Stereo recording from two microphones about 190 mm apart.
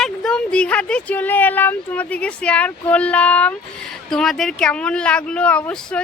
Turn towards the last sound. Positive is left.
turn(degrees=5)  # may be behind; listen again after turning